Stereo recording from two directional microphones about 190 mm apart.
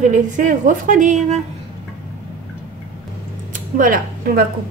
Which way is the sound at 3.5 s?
45° right (ahead or behind).